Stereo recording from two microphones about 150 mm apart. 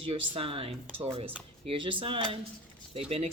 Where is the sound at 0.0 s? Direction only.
40° right (ahead or behind).